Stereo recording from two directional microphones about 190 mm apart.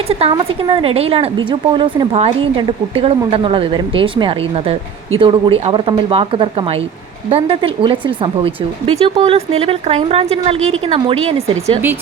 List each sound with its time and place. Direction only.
0.1 s a woman's voice: 30° right (ahead or behind)